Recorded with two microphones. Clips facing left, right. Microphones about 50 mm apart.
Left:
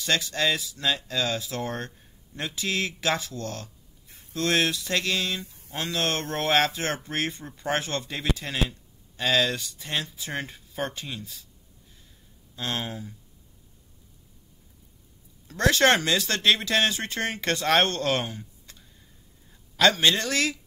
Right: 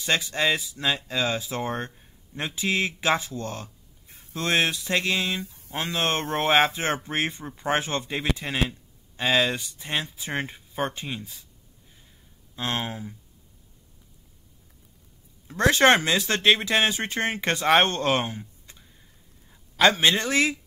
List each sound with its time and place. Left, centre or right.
0.0 s speech: right
12.5 s speech: right
15.4 s a man's voice: right